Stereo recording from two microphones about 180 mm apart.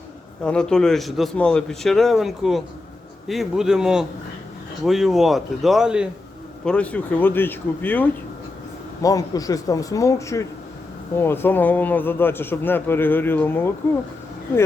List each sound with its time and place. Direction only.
0.4 s a man's voice: 5° left (ahead or behind)
6.7 s a man's voice: 5° left (ahead or behind)
9.0 s a man's voice: 20° left (ahead or behind)